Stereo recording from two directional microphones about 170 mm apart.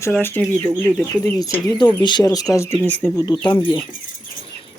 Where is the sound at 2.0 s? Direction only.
25° left (ahead or behind).